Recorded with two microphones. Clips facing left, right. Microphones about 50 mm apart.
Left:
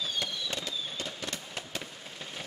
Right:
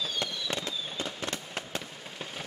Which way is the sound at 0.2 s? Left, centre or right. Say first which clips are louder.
Right 2 dB; right.